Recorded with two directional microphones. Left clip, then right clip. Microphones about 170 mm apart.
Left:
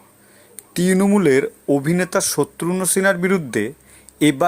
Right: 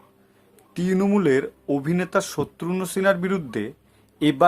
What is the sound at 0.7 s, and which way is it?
Speech, 25° left (ahead or behind).